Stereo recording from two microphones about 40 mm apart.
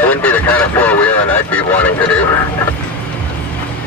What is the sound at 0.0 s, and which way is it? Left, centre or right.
Speech, left.